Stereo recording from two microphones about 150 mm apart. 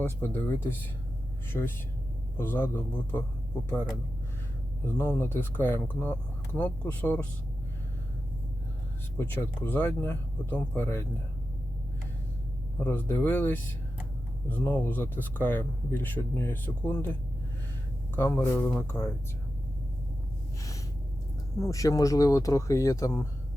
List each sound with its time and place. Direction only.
0.0 s speech: 15° left (ahead or behind)
4.9 s speech: 15° left (ahead or behind)
9.1 s speech: 10° left (ahead or behind)
12.8 s speech: 10° left (ahead or behind)
18.1 s speech: 15° left (ahead or behind)
20.6 s gasp: 20° left (ahead or behind)
21.6 s speech: 20° left (ahead or behind)